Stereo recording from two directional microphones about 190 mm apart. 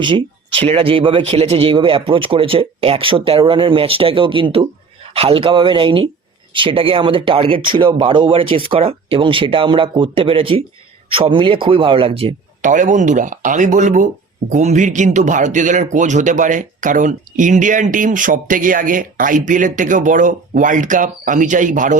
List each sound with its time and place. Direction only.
0.0 s speech: 25° right (ahead or behind); by 21.9 s 40° right (ahead or behind)